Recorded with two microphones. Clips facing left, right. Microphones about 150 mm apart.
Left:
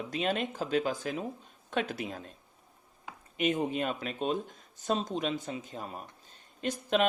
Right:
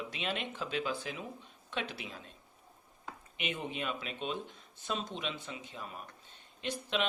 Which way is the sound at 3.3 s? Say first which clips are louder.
Left 9 dB; 40° left (ahead or behind).